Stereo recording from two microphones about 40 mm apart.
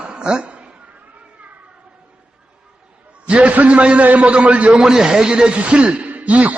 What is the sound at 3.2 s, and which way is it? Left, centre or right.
A man's voice, right.